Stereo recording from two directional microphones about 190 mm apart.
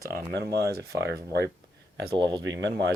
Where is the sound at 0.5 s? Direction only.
55° right (ahead or behind).